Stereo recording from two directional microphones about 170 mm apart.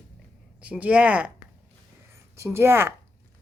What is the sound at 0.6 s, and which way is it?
Speech, 10° right (ahead or behind).